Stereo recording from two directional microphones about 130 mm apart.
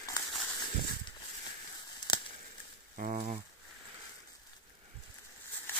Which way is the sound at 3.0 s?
70° right (ahead or behind).